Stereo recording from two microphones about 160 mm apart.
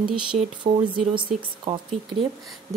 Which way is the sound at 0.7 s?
35° right (ahead or behind).